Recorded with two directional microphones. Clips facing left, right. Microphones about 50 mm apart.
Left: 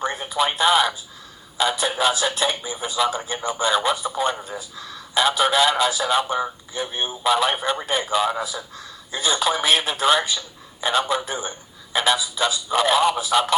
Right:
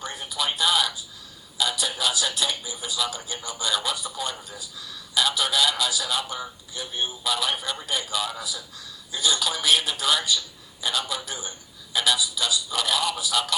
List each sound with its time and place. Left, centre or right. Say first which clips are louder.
0.0 s radio: left 7 dB; left
1.5 s a man's voice: left 6 dB; left